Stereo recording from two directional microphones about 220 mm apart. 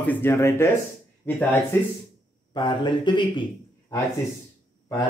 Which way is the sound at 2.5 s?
20° left (ahead or behind).